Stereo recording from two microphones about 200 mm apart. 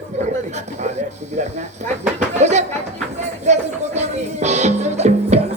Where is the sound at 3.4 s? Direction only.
35° right (ahead or behind).